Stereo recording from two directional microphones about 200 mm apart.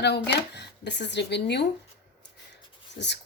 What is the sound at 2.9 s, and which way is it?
Speech, 60° left (ahead or behind).